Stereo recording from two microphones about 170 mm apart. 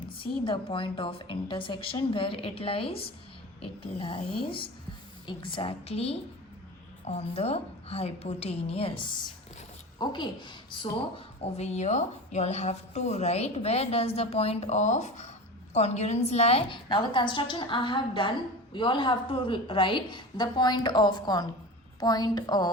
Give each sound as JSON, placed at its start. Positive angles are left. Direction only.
{"t": 0.1, "sound": "a woman's voice", "side_deg": 30}
{"t": 11.5, "sound": "a woman's voice", "side_deg": 40}